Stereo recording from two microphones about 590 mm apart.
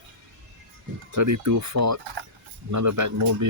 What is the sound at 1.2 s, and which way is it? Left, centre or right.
Speech, right.